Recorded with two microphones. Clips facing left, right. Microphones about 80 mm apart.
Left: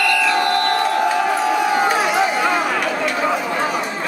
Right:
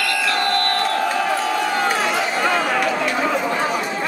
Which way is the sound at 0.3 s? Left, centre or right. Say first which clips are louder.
Left 3 dB; centre.